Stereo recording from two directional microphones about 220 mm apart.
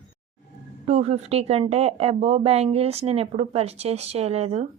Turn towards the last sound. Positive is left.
turn(degrees=-25)  # may be behind; listen again after turning